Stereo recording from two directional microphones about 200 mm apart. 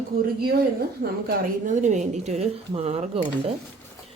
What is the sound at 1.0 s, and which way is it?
A woman's voice, 45° right (ahead or behind).